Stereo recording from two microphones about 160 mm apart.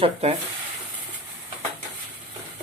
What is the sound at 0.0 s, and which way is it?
Speech, 40° right (ahead or behind).